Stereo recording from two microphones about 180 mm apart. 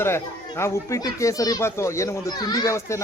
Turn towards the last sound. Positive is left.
turn(degrees=20)  # may be behind; listen again after turning